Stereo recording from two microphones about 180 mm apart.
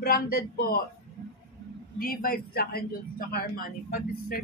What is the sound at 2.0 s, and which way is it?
Speech, 55° left (ahead or behind).